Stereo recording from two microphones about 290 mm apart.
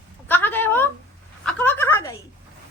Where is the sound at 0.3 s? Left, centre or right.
Centre.